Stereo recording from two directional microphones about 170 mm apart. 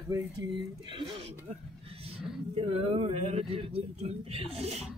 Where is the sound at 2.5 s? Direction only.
35° right (ahead or behind).